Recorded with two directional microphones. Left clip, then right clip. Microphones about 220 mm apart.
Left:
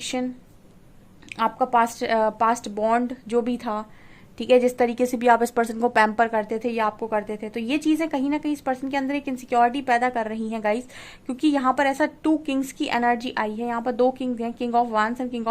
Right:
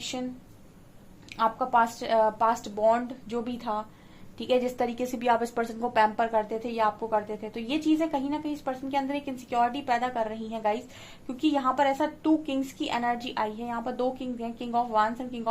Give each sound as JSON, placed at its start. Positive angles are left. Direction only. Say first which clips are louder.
{"t": 0.0, "sound": "speech", "louder": "left 6 dB", "side_deg": 45}
{"t": 1.4, "sound": "a woman's voice", "louder": "left 3 dB", "side_deg": 40}